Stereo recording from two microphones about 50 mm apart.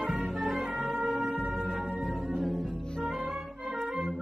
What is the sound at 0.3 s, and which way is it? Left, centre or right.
Music, centre.